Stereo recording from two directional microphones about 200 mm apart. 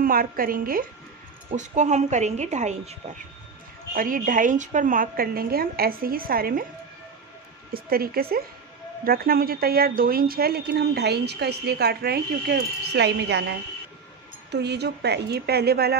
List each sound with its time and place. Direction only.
0.0 s a woman's voice: 45° right (ahead or behind)
3.9 s speech: 45° right (ahead or behind)
7.7 s a woman's voice: 50° right (ahead or behind)